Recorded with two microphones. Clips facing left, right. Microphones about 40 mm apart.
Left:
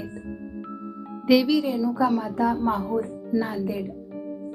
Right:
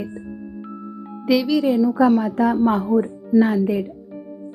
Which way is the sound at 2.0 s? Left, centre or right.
Right.